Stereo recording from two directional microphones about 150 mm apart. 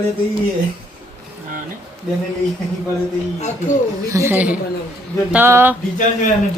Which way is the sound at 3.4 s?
50° left (ahead or behind).